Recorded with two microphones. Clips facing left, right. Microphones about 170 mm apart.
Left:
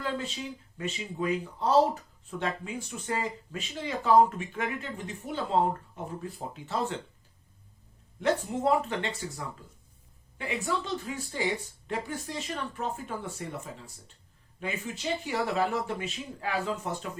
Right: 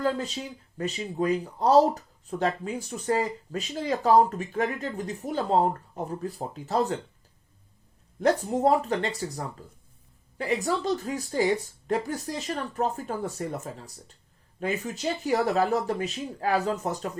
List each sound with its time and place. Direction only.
0.0 s speech: 40° right (ahead or behind)
8.2 s speech: 40° right (ahead or behind)